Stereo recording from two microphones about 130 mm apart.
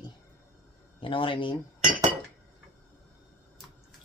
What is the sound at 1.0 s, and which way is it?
Speech, 40° left (ahead or behind).